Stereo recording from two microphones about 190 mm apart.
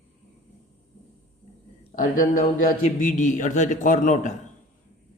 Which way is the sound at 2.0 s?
45° left (ahead or behind).